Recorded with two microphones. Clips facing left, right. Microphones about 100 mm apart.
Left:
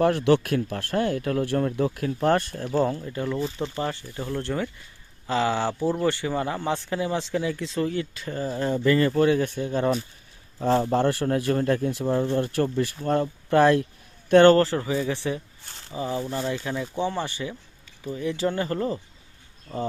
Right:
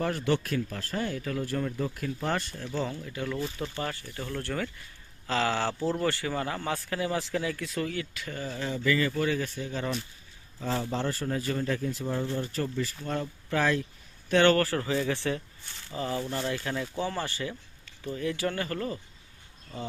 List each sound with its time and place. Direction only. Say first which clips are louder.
0.0 s speech: left 8 dB; 75° left (ahead or behind); by 10.0 s 45° left (ahead or behind)
10.6 s speech: left 9 dB; 60° left (ahead or behind)
13.1 s speech: left 9 dB; 55° left (ahead or behind)
14.5 s speech: left 5 dB; 25° left (ahead or behind)
19.7 s speech: left 8 dB; 35° left (ahead or behind)